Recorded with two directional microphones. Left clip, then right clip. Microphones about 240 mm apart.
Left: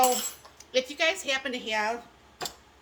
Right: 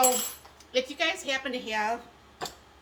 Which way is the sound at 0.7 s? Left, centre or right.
Left.